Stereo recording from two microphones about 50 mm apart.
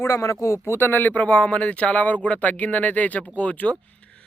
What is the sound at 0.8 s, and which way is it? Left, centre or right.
Speech, left.